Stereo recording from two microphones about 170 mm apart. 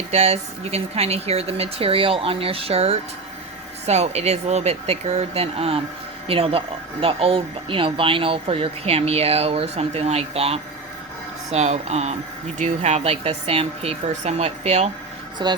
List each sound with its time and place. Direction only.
0.1 s speech: 40° right (ahead or behind)
15.4 s speech: 25° right (ahead or behind)